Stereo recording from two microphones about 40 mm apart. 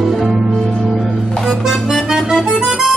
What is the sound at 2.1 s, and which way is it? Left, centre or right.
Music, centre.